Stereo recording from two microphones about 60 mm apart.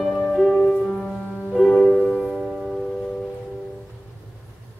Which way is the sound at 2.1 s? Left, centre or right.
Centre.